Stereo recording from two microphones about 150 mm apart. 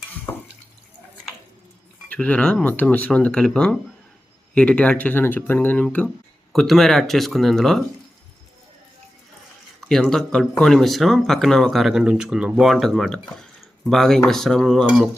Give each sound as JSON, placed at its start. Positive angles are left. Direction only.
{"t": 2.0, "sound": "speech", "side_deg": 10}
{"t": 9.9, "sound": "speech", "side_deg": 5}